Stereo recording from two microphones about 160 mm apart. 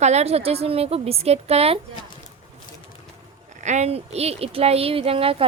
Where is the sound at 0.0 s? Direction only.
45° right (ahead or behind).